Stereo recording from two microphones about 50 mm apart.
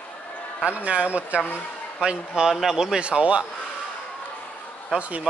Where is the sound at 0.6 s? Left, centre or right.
Right.